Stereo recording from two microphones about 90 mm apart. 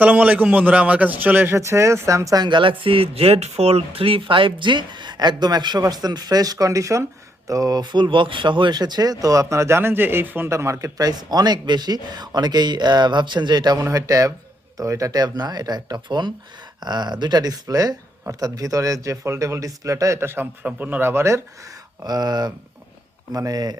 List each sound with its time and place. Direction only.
0.0 s a man's voice: 15° right (ahead or behind)
1.6 s speech: 35° right (ahead or behind); by 13.8 s 50° right (ahead or behind)
13.8 s speech: 40° right (ahead or behind)
22.0 s speech: 50° right (ahead or behind)